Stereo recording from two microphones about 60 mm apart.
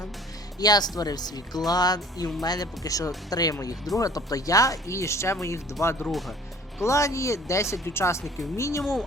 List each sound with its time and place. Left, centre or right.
0.6 s speech: left
6.1 s speech: centre
6.8 s speech: left